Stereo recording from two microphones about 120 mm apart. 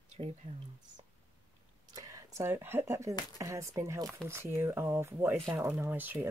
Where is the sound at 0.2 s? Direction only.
65° right (ahead or behind).